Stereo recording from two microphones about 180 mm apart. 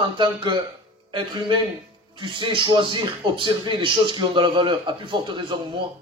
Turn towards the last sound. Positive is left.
turn(degrees=-25)  # may be behind; listen again after turning